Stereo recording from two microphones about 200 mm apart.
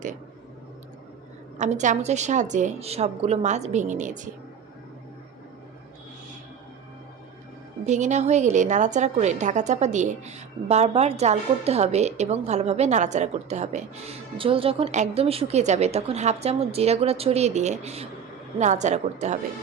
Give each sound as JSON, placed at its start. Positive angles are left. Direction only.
{"t": 1.5, "sound": "a woman's voice", "side_deg": -35}
{"t": 7.9, "sound": "a woman's voice", "side_deg": -35}